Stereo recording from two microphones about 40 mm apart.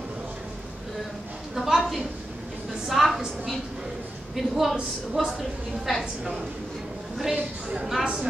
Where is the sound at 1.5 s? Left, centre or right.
Centre.